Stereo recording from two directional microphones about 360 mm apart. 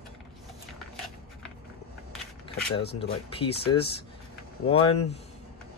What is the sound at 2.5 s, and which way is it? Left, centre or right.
Speech, centre.